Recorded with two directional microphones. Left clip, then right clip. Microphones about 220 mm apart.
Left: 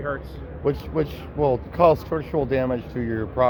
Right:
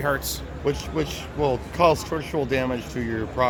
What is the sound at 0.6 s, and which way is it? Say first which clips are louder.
A man's voice: left 2 dB; 15° left (ahead or behind).